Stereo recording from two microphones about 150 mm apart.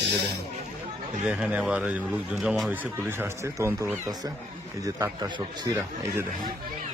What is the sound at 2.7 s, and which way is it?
A man's voice, 10° right (ahead or behind).